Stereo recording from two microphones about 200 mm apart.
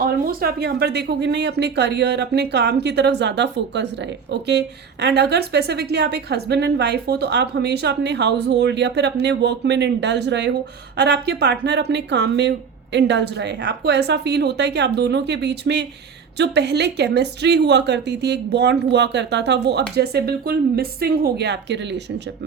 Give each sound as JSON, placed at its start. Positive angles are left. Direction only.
{"t": 0.0, "sound": "a woman's voice", "side_deg": -45}